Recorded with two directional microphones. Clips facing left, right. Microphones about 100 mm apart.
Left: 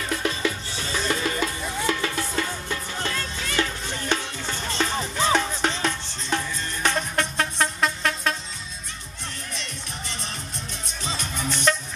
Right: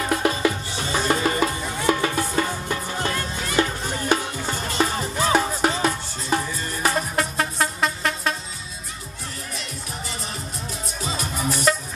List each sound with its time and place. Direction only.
0.1 s music: 45° right (ahead or behind)
1.9 s music: 20° right (ahead or behind)
2.1 s music: 35° right (ahead or behind)
2.7 s music: 15° right (ahead or behind)
11.1 s music: 5° right (ahead or behind)